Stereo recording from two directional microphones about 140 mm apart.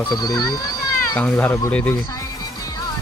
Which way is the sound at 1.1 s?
15° left (ahead or behind).